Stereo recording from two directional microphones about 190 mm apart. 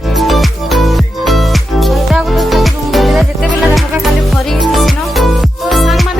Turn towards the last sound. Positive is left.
turn(degrees=0)  # may be behind; listen again after turning